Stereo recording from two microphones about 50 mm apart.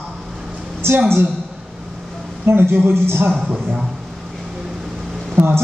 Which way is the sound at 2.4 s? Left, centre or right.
Right.